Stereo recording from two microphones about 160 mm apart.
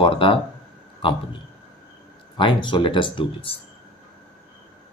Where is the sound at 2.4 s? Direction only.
30° left (ahead or behind).